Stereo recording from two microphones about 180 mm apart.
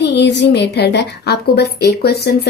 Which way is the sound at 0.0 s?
75° left (ahead or behind).